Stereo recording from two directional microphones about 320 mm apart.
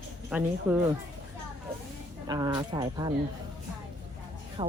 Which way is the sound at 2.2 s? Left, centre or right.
Centre.